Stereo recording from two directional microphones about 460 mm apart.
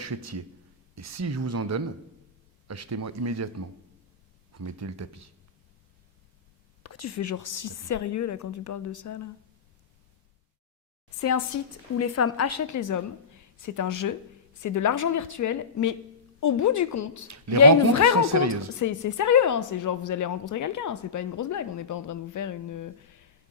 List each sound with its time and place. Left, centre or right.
0.0 s a man's voice: right
4.5 s speech: right
6.8 s a woman's voice: left
11.5 s a woman's voice: left
17.2 s speech: right
18.8 s a woman's voice: left